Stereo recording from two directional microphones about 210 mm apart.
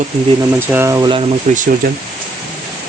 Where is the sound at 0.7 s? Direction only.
10° right (ahead or behind).